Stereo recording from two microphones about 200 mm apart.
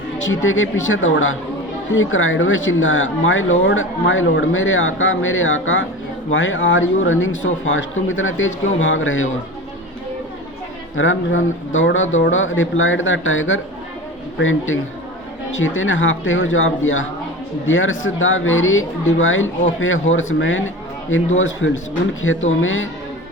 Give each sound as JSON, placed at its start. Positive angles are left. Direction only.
{"t": 0.3, "sound": "speech", "side_deg": 80}
{"t": 10.9, "sound": "speech", "side_deg": 75}